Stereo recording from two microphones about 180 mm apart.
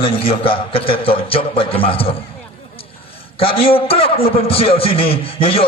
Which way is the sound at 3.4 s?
30° left (ahead or behind).